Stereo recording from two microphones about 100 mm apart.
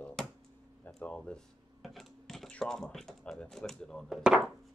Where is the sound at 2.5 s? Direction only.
5° left (ahead or behind).